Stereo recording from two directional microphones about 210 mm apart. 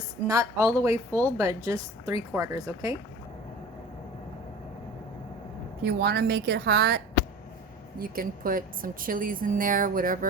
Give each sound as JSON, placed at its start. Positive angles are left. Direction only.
{"t": 0.3, "sound": "speech", "side_deg": -15}
{"t": 5.8, "sound": "a woman's voice", "side_deg": -50}